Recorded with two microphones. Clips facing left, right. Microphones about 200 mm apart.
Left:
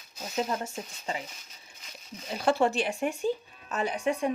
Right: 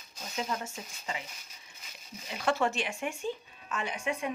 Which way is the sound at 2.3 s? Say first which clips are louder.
Left 4 dB; 35° left (ahead or behind).